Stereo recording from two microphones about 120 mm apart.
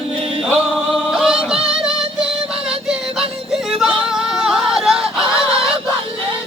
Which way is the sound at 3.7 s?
5° right (ahead or behind).